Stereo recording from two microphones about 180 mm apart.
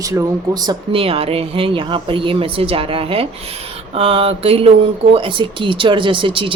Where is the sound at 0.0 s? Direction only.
20° right (ahead or behind).